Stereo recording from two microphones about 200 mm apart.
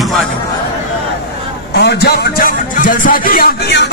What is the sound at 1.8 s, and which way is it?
Speech, 55° left (ahead or behind).